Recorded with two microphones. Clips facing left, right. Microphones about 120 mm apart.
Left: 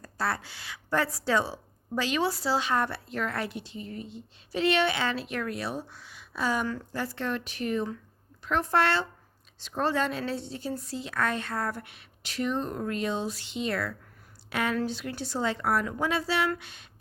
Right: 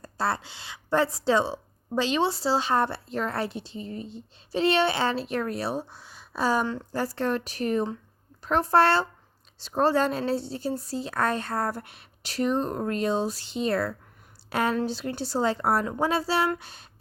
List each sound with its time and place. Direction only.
0.0 s speech: 25° right (ahead or behind)